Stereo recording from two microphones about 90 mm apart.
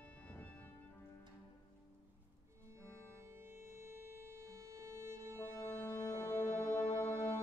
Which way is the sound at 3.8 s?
30° right (ahead or behind).